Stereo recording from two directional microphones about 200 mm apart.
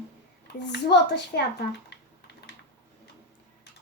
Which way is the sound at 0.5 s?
60° left (ahead or behind).